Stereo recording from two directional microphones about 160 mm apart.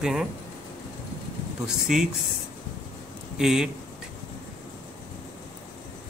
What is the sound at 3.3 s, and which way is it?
Speech, 5° right (ahead or behind).